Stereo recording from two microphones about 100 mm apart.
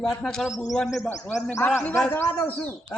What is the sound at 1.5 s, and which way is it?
A man's voice, 20° left (ahead or behind).